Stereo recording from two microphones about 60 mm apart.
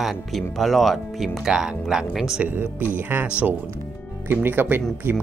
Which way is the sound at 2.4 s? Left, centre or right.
Right.